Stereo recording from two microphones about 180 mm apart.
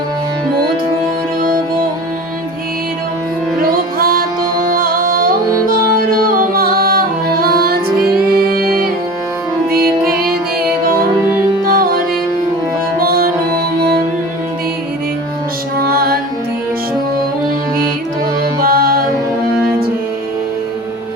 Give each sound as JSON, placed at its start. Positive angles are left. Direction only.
{"t": 3.6, "sound": "music", "side_deg": -55}
{"t": 11.6, "sound": "music", "side_deg": -50}
{"t": 13.0, "sound": "music", "side_deg": -55}
{"t": 15.8, "sound": "music", "side_deg": -55}
{"t": 18.6, "sound": "music", "side_deg": -55}